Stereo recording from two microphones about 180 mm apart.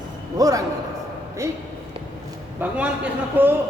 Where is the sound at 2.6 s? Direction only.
10° right (ahead or behind).